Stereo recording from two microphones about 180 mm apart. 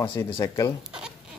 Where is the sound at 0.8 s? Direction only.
5° right (ahead or behind).